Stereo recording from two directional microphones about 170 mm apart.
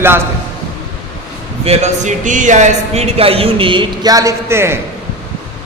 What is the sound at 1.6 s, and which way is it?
Speech, 40° right (ahead or behind).